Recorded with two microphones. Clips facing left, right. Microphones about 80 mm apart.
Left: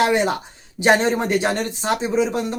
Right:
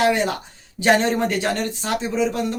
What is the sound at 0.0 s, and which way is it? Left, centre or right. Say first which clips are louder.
Speech: left 1 dB; left.